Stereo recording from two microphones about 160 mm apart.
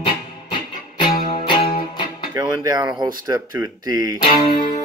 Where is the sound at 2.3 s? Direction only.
25° right (ahead or behind).